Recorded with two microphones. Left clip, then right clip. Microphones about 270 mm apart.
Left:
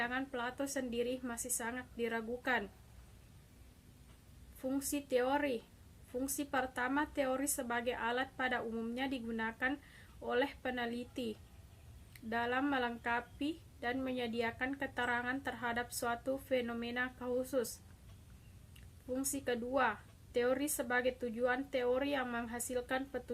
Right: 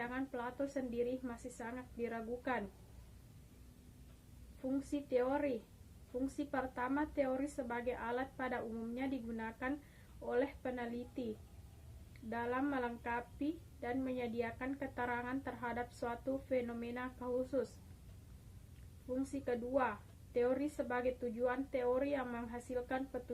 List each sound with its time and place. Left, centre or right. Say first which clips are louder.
0.0 s a woman's voice: left 4 dB; centre
4.8 s a woman's voice: left 2 dB; centre
12.3 s a woman's voice: left 4 dB; centre
19.1 s a woman's voice: left 2 dB; centre